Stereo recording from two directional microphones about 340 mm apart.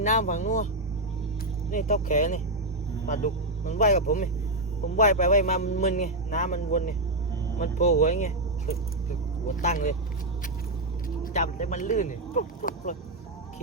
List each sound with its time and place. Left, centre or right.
0.0 s speech: left
1.7 s speech: left
11.2 s speech: left